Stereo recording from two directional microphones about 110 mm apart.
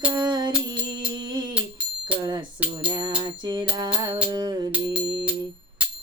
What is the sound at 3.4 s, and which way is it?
Music, 40° right (ahead or behind).